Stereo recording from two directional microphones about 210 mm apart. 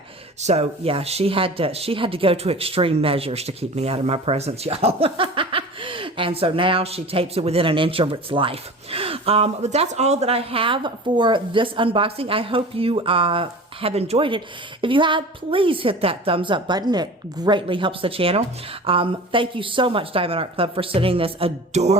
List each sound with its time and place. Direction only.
0.4 s speech: 30° right (ahead or behind)